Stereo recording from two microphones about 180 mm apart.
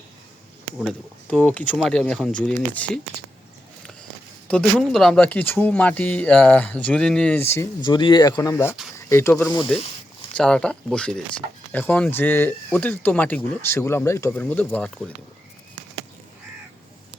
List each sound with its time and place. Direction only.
0.9 s speech: 5° left (ahead or behind)
4.4 s speech: 5° left (ahead or behind)
7.8 s speech: 25° left (ahead or behind)
9.0 s a sound: 15° left (ahead or behind)
10.3 s speech: 5° left (ahead or behind)